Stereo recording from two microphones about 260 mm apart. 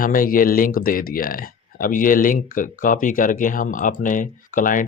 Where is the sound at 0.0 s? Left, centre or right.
Left.